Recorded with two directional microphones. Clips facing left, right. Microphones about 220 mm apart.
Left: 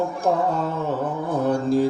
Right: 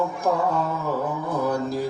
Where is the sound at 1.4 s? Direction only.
30° left (ahead or behind).